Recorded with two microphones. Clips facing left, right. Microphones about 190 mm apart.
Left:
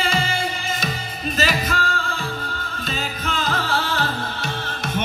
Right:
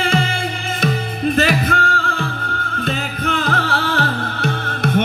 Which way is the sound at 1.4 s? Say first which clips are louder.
Right 4 dB; 60° right (ahead or behind).